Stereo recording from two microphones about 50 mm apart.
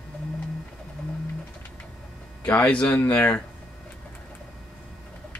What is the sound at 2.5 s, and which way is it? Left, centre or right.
Speech, left.